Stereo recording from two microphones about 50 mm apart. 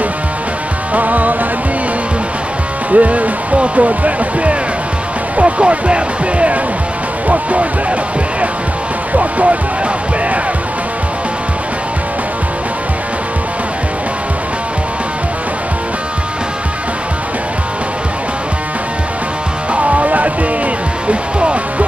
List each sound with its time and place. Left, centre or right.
0.9 s music: right
2.9 s speech: right
9.1 s speech: right
19.7 s music: right
21.1 s speech: right